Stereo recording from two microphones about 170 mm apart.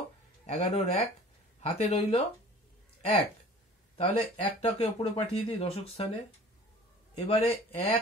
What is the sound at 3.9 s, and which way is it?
Speech, 40° left (ahead or behind).